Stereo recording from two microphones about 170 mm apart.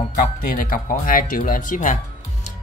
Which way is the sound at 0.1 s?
55° left (ahead or behind).